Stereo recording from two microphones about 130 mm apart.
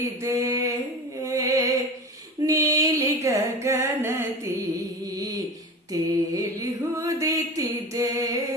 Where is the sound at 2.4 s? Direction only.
25° right (ahead or behind).